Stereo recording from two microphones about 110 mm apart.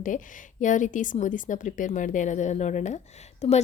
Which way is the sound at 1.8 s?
90° left.